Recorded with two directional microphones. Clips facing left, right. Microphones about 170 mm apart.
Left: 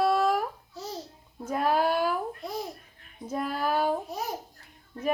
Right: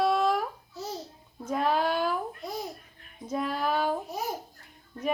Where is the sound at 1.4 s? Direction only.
5° left (ahead or behind).